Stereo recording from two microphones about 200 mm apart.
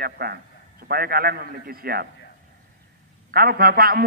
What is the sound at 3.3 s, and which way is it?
Speech, 50° right (ahead or behind).